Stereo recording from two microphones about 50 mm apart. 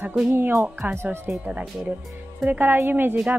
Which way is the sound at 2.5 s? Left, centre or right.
Right.